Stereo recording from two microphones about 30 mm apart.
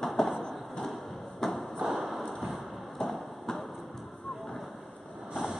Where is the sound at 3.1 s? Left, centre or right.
Centre.